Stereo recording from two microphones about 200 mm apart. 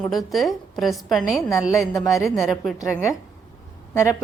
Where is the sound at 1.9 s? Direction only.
15° left (ahead or behind).